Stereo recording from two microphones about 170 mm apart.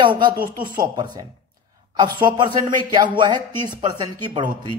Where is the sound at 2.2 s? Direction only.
25° right (ahead or behind).